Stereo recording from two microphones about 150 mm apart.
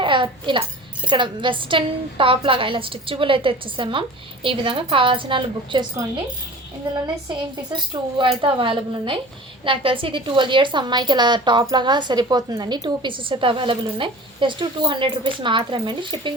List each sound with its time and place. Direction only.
0.0 s a sound: 35° right (ahead or behind)
1.0 s a woman's voice: 35° right (ahead or behind)
6.8 s a woman's voice: 35° right (ahead or behind)
8.2 s a woman's voice: 35° right (ahead or behind)